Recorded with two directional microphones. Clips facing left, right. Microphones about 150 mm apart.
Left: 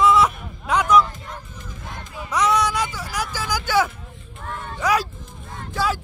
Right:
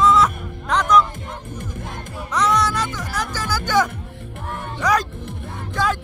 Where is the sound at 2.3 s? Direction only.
10° left (ahead or behind).